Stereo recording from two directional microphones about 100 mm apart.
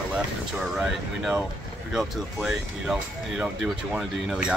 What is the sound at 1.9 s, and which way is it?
Speech, 5° right (ahead or behind).